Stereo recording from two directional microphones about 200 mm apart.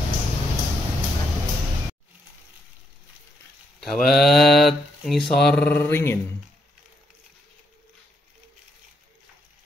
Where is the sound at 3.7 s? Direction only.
Centre (ahead or behind).